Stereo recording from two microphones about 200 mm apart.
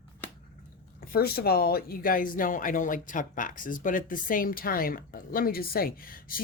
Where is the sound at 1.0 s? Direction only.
50° left (ahead or behind).